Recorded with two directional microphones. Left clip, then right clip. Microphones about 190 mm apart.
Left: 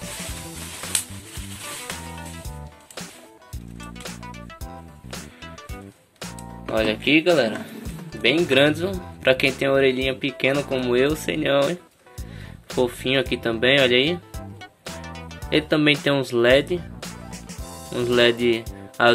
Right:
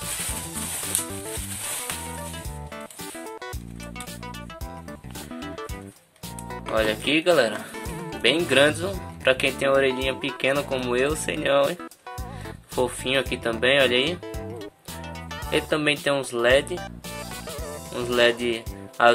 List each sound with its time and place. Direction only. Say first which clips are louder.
6.7 s speech: left 3 dB; 5° right (ahead or behind)
15.5 s speech: left 4 dB; centre (ahead or behind)
17.9 s speech: left 2 dB; centre (ahead or behind)